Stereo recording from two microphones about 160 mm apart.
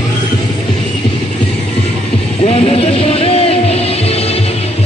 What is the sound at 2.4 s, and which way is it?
Music, 35° left (ahead or behind).